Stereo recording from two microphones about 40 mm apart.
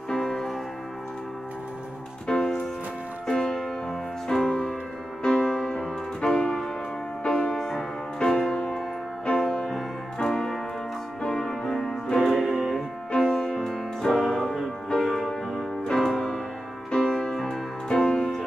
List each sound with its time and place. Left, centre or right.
0.1 s music: centre
2.2 s music: centre
12.3 s music: centre
13.2 s music: centre
14.9 s music: centre